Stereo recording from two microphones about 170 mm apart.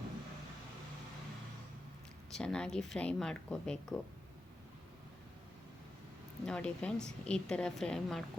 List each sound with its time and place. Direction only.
2.3 s a woman's voice: 5° left (ahead or behind)
6.4 s a woman's voice: 5° left (ahead or behind)